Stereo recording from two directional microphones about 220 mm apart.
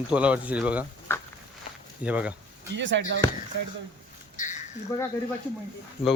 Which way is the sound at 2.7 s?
55° right (ahead or behind).